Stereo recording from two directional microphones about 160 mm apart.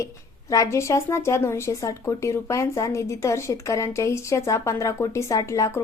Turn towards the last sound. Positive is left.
turn(degrees=20)  # may be behind; listen again after turning